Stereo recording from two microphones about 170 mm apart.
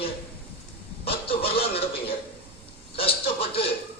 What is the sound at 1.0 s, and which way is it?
Chuckle, 35° left (ahead or behind).